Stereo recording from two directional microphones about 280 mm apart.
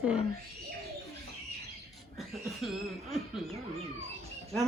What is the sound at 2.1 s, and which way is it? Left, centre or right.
Speech, centre.